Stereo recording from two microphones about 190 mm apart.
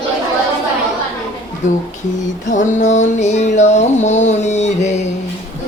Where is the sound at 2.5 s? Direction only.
40° left (ahead or behind).